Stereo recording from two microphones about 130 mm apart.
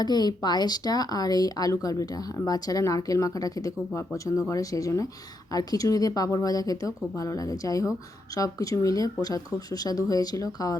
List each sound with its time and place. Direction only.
0.0 s speech: 30° left (ahead or behind)